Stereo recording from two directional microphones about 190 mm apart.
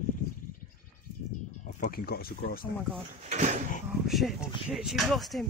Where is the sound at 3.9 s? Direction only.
Centre (ahead or behind).